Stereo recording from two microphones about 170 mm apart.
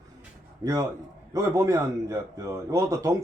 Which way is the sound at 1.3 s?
15° right (ahead or behind).